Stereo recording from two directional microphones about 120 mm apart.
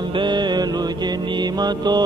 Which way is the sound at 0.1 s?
40° right (ahead or behind).